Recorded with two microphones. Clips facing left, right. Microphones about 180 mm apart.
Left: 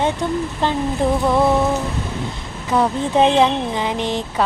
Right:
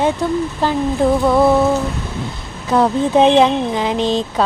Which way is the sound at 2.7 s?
10° right (ahead or behind).